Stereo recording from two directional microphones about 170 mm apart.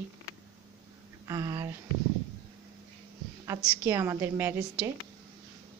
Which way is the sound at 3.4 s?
20° right (ahead or behind).